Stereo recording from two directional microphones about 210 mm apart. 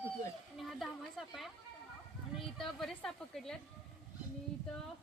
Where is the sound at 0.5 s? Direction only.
Centre (ahead or behind).